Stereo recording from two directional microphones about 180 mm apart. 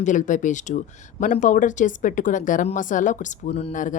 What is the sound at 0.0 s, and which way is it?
A woman's voice, 45° left (ahead or behind).